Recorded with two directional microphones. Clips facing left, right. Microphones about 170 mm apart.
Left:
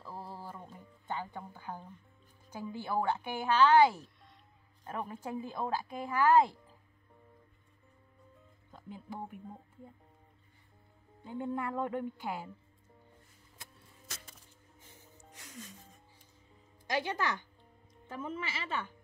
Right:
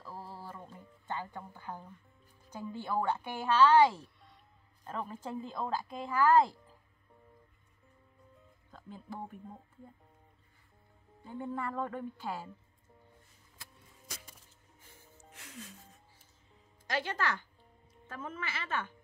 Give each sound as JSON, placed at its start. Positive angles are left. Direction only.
{"t": 0.0, "sound": "music", "side_deg": 15}
{"t": 2.5, "sound": "a woman's voice", "side_deg": 10}
{"t": 8.7, "sound": "speech", "side_deg": 15}
{"t": 11.2, "sound": "a woman's voice", "side_deg": 15}
{"t": 14.0, "sound": "music", "side_deg": -10}
{"t": 16.8, "sound": "a woman's voice", "side_deg": 15}